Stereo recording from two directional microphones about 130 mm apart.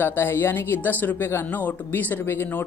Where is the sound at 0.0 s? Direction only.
15° left (ahead or behind).